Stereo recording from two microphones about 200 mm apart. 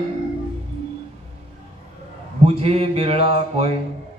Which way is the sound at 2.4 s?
30° right (ahead or behind).